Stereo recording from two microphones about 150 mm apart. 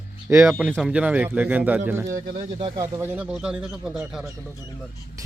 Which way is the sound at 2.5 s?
30° right (ahead or behind).